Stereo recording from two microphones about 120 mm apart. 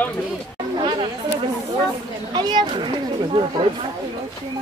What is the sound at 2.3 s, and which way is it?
Speech, 40° right (ahead or behind).